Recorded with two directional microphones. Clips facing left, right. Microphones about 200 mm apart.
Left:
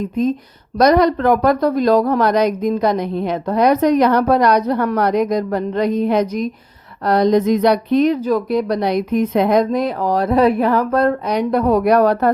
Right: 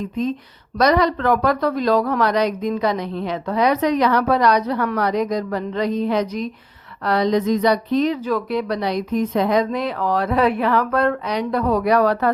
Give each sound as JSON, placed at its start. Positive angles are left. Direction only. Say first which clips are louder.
{"t": 0.0, "sound": "a woman's voice", "louder": "left 5 dB", "side_deg": 45}